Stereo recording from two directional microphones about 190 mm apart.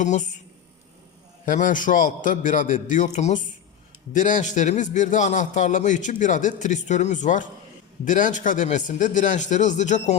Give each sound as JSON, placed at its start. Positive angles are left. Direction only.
{"t": 0.0, "sound": "a man's voice", "side_deg": 40}
{"t": 1.5, "sound": "a man's voice", "side_deg": 45}